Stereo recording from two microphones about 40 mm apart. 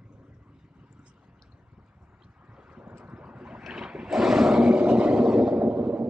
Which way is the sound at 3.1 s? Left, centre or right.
Right.